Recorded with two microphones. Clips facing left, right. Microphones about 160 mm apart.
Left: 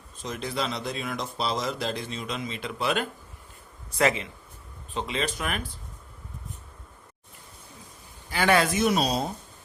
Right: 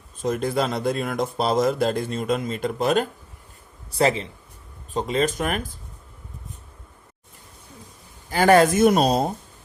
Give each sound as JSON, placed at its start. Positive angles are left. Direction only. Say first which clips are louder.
{"t": 0.2, "sound": "a man's voice", "louder": "right 8 dB", "side_deg": -50}
{"t": 8.3, "sound": "speech", "louder": "right 7 dB", "side_deg": -45}